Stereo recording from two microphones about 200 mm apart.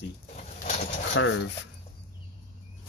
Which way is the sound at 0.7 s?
40° left (ahead or behind).